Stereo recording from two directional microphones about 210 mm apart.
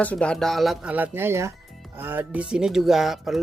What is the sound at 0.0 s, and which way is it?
Speech, 5° left (ahead or behind).